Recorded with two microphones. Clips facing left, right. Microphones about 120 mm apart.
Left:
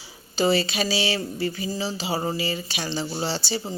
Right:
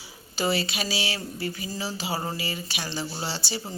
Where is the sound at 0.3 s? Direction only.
25° left (ahead or behind).